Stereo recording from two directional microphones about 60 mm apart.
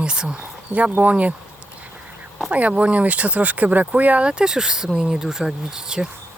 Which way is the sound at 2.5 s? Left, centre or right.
Right.